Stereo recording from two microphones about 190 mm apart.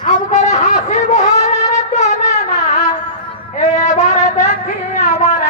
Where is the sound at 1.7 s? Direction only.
35° left (ahead or behind).